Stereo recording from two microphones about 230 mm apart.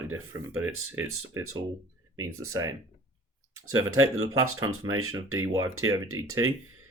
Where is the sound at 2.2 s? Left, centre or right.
Centre.